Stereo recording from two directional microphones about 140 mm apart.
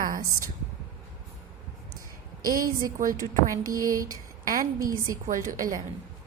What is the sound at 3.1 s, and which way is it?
A woman's voice, 25° right (ahead or behind).